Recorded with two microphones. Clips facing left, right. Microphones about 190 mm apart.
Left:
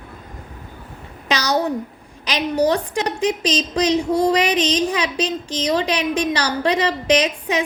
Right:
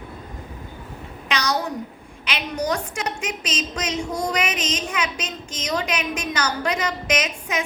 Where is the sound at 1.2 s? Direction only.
35° left (ahead or behind).